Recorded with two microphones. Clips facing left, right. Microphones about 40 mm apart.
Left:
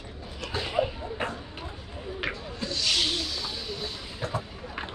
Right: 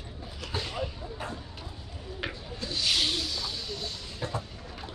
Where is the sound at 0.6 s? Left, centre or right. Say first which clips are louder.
Left 7 dB; centre.